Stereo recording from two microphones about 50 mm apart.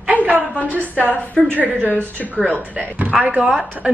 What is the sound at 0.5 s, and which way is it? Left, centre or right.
Speech, left.